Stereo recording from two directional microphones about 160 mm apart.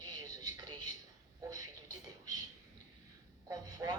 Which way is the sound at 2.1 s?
25° right (ahead or behind).